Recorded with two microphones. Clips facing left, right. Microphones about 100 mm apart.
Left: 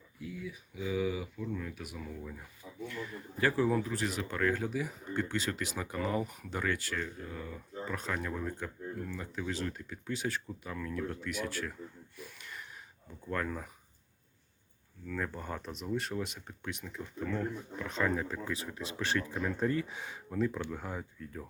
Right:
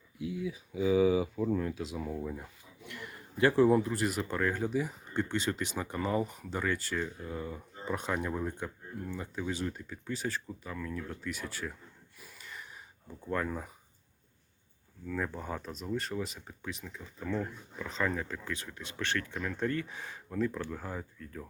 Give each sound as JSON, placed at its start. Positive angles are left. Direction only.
{"t": 0.9, "sound": "speech", "side_deg": -30}
{"t": 2.2, "sound": "speech", "side_deg": -25}
{"t": 3.8, "sound": "speech", "side_deg": -5}
{"t": 4.7, "sound": "speech", "side_deg": 5}
{"t": 6.6, "sound": "speech", "side_deg": -10}
{"t": 12.2, "sound": "a sound", "side_deg": 0}
{"t": 13.2, "sound": "speech", "side_deg": -10}
{"t": 15.0, "sound": "speech", "side_deg": -5}